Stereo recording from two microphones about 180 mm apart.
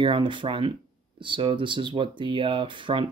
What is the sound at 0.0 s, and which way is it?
Speech, 30° right (ahead or behind).